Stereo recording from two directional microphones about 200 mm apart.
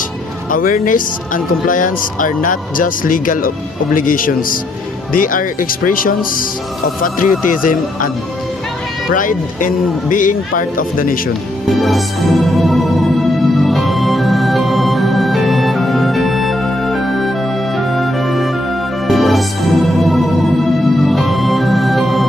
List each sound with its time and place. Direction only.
0.5 s speech: 45° left (ahead or behind)
11.6 s music: centre (ahead or behind)